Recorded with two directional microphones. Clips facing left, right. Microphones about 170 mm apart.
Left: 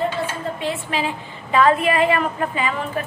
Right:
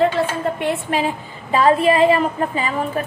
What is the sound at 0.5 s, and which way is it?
Speech, 55° right (ahead or behind).